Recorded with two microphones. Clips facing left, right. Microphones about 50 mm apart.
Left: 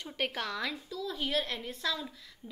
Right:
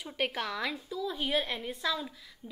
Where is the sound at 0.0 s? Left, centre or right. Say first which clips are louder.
Right 2 dB; centre.